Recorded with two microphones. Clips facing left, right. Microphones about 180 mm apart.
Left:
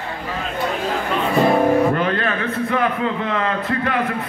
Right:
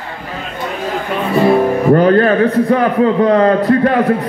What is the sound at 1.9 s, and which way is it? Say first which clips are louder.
A man's voice: right 11 dB; 40° right (ahead or behind).